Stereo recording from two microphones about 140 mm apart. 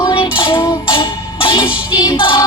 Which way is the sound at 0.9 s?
35° left (ahead or behind).